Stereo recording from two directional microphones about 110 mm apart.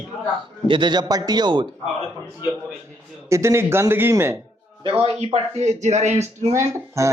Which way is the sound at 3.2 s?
25° right (ahead or behind).